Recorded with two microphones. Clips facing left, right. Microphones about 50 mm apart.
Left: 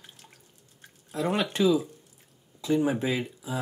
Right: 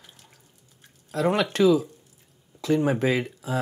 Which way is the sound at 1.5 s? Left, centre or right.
Right.